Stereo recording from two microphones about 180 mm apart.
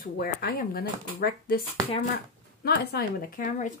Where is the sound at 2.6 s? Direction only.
60° left (ahead or behind).